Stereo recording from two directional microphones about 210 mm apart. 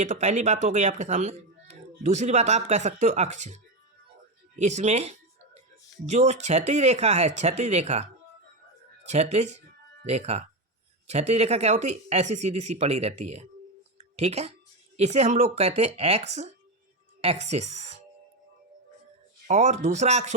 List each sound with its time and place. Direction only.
0.0 s speech: 35° right (ahead or behind)
9.0 s speech: 30° right (ahead or behind)
19.5 s speech: 35° right (ahead or behind)